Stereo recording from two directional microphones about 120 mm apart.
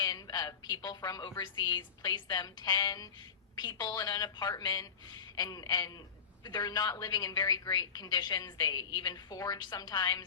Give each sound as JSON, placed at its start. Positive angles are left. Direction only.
{"t": 0.0, "sound": "a woman's voice", "side_deg": 35}